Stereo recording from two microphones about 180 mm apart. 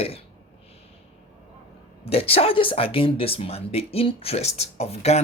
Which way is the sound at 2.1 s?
30° left (ahead or behind).